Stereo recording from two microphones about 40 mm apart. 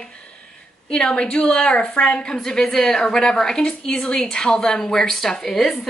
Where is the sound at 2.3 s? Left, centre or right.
Centre.